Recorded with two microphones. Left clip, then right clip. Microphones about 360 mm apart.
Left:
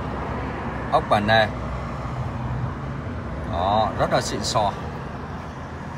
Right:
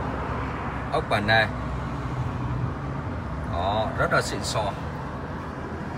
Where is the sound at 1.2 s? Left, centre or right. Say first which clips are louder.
Left 3 dB; right.